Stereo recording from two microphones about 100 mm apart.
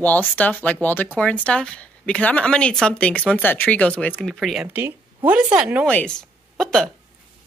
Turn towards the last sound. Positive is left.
turn(degrees=5)  # may be behind; listen again after turning